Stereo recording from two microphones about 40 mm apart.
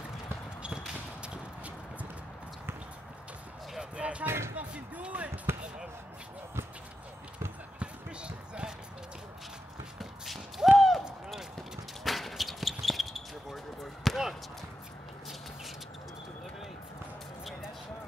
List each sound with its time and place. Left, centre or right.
1.2 s a sound: right
3.9 s music: right
4.6 s basketball bounce: right
7.8 s basketball bounce: right
9.9 s a sound: centre
12.0 s basketball bounce: centre